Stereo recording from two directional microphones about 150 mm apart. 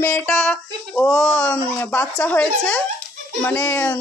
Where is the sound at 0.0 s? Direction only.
10° left (ahead or behind).